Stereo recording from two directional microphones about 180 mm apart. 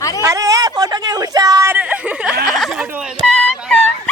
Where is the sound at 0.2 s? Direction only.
20° right (ahead or behind).